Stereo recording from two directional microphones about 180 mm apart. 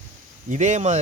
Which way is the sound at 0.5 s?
40° right (ahead or behind).